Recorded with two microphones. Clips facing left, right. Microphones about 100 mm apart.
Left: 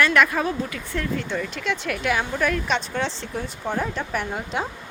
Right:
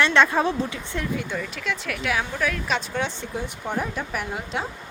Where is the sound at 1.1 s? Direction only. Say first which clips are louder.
Left 1 dB; 10° right (ahead or behind).